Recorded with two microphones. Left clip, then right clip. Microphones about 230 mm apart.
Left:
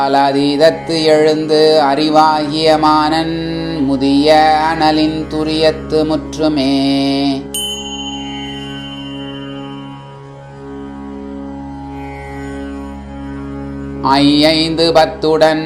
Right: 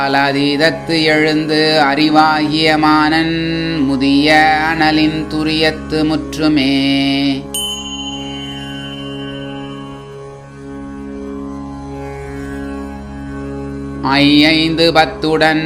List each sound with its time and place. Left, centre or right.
0.0 s music: right
7.5 s music: centre
14.0 s music: right
14.8 s music: right